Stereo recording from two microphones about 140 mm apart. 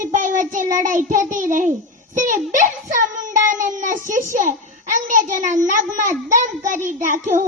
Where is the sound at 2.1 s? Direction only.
65° right (ahead or behind).